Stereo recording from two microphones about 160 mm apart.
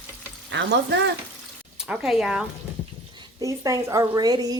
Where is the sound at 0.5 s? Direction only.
90° right.